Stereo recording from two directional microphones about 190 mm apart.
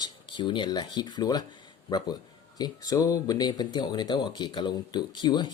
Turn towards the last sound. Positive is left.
turn(degrees=25)  # may be behind; listen again after turning